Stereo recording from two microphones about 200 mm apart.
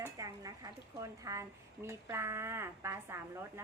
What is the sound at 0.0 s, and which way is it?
Speech, 15° right (ahead or behind).